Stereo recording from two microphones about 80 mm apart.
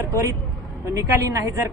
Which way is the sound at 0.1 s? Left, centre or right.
Right.